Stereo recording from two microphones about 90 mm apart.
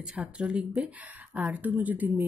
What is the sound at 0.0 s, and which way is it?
Speech, 10° right (ahead or behind).